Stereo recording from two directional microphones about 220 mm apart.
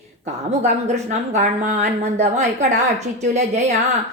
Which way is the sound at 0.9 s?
35° right (ahead or behind).